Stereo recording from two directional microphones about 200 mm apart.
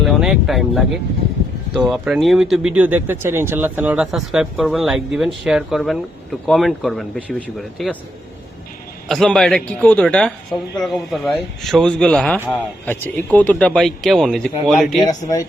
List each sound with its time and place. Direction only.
0.0 s speech: centre (ahead or behind)
9.0 s speech: centre (ahead or behind)
14.9 s speech: 20° left (ahead or behind)